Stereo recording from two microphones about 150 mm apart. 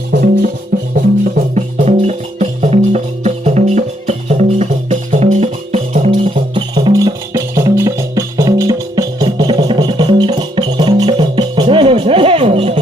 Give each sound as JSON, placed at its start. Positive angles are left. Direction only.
{"t": 0.1, "sound": "music", "side_deg": -90}
{"t": 0.7, "sound": "music", "side_deg": -65}
{"t": 1.5, "sound": "music", "side_deg": -45}
{"t": 6.3, "sound": "music", "side_deg": -30}